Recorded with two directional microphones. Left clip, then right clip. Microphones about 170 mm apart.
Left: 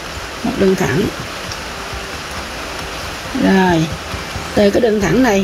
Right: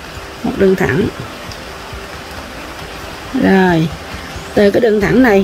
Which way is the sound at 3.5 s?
40° right (ahead or behind).